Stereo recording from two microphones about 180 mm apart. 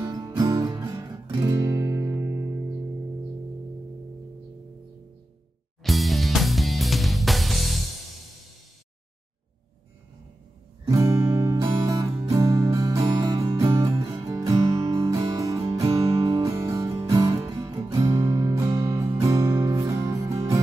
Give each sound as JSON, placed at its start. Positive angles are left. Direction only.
{"t": 0.0, "sound": "guitar", "side_deg": -20}
{"t": 5.9, "sound": "music", "side_deg": 0}
{"t": 10.9, "sound": "music", "side_deg": -15}